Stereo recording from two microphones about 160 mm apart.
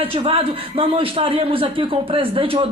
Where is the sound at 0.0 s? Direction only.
35° right (ahead or behind).